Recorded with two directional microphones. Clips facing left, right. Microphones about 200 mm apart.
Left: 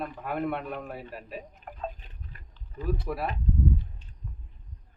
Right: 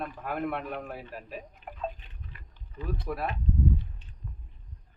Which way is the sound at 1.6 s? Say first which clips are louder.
Right 1 dB; 40° left (ahead or behind).